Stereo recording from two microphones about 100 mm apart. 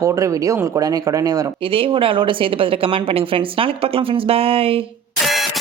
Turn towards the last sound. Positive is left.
turn(degrees=0)  # may be behind; listen again after turning